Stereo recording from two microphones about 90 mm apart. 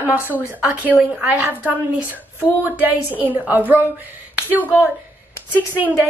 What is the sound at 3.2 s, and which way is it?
Speech, 20° right (ahead or behind).